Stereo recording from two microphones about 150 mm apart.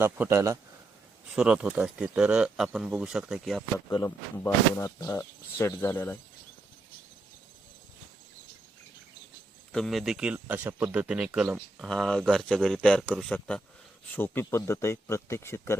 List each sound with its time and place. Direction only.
0.0 s a man's voice: 15° right (ahead or behind)
1.4 s speech: 5° right (ahead or behind)
3.8 s speech: 20° left (ahead or behind)
9.7 s speech: centre (ahead or behind)
11.8 s speech: 5° left (ahead or behind)